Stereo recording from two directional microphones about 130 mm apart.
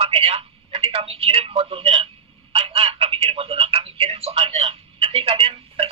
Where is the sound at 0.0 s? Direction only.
45° right (ahead or behind).